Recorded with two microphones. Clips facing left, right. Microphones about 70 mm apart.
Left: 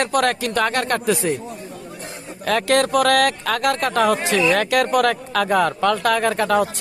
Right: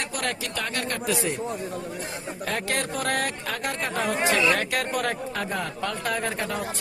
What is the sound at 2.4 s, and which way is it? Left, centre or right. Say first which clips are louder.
Speech: left 11 dB; left.